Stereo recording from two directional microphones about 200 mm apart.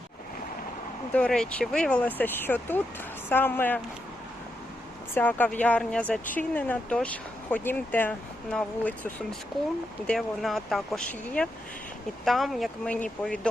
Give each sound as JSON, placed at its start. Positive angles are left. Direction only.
{"t": 1.1, "sound": "speech", "side_deg": 5}
{"t": 5.1, "sound": "speech", "side_deg": 10}